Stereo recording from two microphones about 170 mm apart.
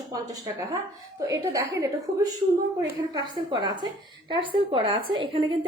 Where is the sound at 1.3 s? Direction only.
20° right (ahead or behind).